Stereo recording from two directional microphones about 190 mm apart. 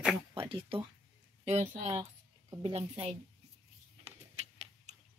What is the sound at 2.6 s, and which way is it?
Speech, 30° right (ahead or behind).